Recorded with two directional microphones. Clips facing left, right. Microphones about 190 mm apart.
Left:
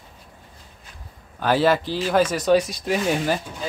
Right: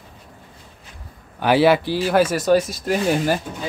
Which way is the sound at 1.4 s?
10° right (ahead or behind).